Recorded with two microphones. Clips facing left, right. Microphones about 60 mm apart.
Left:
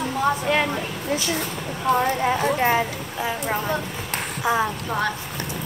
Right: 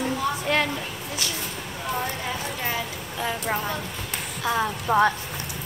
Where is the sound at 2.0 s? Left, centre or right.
Left.